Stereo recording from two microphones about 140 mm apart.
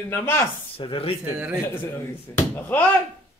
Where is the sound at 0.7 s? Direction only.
40° left (ahead or behind).